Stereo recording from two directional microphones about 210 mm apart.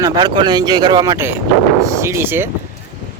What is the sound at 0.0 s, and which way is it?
Speech, 20° right (ahead or behind).